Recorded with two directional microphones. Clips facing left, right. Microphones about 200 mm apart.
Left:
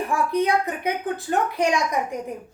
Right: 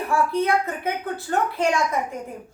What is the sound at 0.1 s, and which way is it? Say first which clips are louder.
A woman's voice: right 1 dB; 15° left (ahead or behind).